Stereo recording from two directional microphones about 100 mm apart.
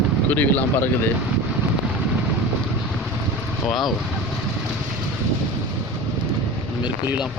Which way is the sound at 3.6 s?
Centre (ahead or behind).